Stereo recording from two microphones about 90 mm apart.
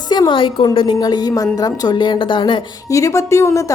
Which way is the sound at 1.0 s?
50° left (ahead or behind).